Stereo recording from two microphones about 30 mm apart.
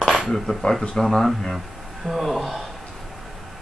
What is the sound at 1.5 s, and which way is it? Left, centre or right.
Speech, centre.